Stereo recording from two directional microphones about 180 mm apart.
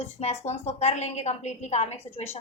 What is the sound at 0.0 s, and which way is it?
Speech, 35° left (ahead or behind).